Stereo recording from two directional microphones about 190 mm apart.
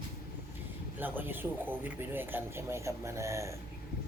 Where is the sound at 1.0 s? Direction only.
10° right (ahead or behind).